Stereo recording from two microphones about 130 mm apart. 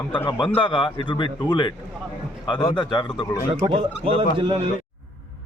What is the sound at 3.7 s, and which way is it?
Speech, 45° right (ahead or behind).